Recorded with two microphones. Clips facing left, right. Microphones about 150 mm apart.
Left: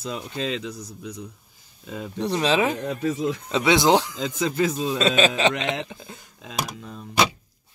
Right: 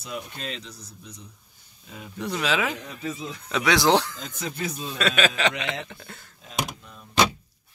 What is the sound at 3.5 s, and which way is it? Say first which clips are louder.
Speech: left 2 dB; 20° left (ahead or behind).